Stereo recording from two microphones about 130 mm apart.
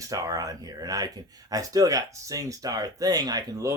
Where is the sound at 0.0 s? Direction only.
25° right (ahead or behind).